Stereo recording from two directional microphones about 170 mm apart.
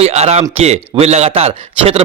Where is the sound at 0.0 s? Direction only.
40° right (ahead or behind).